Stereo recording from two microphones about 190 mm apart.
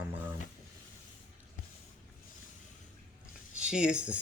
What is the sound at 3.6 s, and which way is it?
Speech, 5° right (ahead or behind).